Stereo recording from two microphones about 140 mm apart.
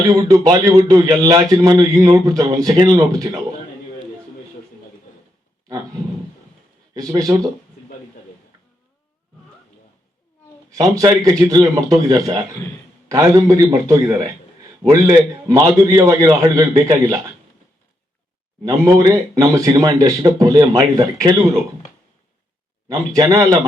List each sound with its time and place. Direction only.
0.2 s a man's voice: 25° right (ahead or behind)
6.9 s a man's voice: 25° right (ahead or behind)
10.8 s a man's voice: 25° right (ahead or behind)
18.6 s a man's voice: 25° right (ahead or behind)
22.9 s a man's voice: 25° right (ahead or behind)